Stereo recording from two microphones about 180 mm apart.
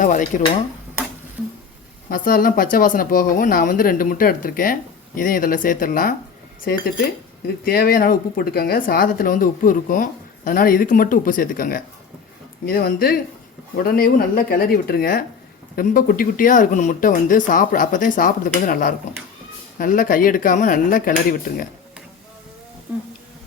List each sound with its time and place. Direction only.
0.0 s speech: 45° left (ahead or behind)
2.0 s speech: 50° left (ahead or behind)
7.4 s speech: 55° left (ahead or behind)